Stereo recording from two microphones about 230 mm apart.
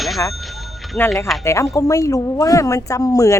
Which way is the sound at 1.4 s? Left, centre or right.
Centre.